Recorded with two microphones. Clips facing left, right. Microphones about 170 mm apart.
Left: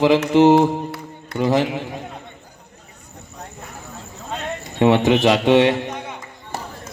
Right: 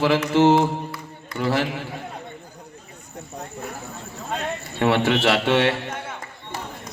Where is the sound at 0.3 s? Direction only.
15° left (ahead or behind).